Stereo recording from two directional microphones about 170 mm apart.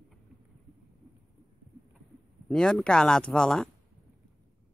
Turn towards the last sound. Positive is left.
turn(degrees=5)  # may be behind; listen again after turning